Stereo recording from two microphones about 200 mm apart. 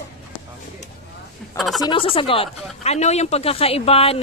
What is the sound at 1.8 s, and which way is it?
Speech, 25° left (ahead or behind).